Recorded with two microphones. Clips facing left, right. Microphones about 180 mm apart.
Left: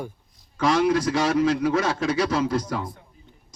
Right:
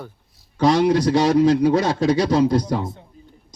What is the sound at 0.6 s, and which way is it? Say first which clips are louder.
Speech: right 4 dB; 35° right (ahead or behind).